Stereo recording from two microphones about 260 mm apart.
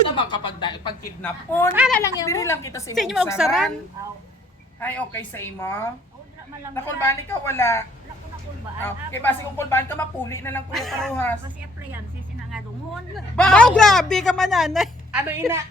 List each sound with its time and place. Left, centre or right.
0.2 s speech: centre
1.7 s a woman's voice: centre
2.0 s speech: centre
2.9 s a woman's voice: centre
4.8 s speech: centre
13.1 s a woman's voice: centre